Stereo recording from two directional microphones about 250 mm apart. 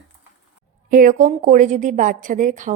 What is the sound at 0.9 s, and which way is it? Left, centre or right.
A woman's voice, right.